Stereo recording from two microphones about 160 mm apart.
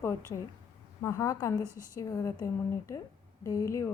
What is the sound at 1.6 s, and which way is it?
Speech, 15° right (ahead or behind).